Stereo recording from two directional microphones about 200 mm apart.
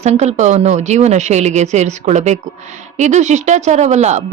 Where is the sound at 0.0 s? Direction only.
35° right (ahead or behind).